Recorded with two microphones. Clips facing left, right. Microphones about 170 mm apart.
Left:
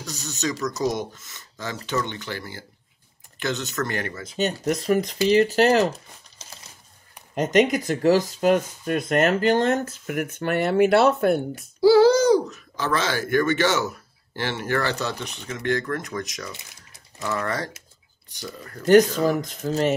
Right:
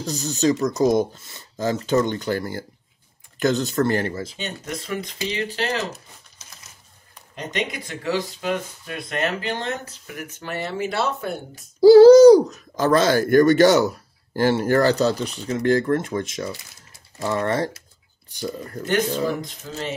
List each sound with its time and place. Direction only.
0.0 s speech: 35° right (ahead or behind)
4.4 s speech: 40° left (ahead or behind)
6.4 s a sound: 30° left (ahead or behind)
7.3 s speech: 45° left (ahead or behind); by 11.6 s 60° left (ahead or behind)
11.8 s speech: 40° right (ahead or behind)
18.9 s speech: 40° left (ahead or behind)